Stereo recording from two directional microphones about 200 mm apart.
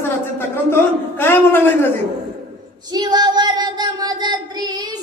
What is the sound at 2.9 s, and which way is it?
Child singing, 20° right (ahead or behind).